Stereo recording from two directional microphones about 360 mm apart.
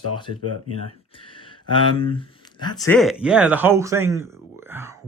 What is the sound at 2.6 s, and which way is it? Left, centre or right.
Speech, centre.